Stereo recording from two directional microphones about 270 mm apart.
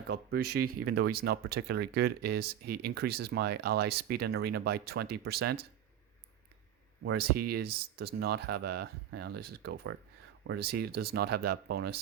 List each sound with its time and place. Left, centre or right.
0.3 s speech: right
1.1 s speech: right
7.0 s speech: right